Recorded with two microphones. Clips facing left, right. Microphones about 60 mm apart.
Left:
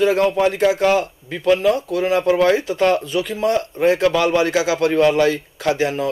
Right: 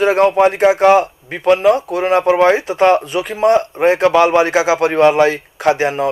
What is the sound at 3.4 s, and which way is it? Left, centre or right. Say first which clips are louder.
A man's voice: right 6 dB; right.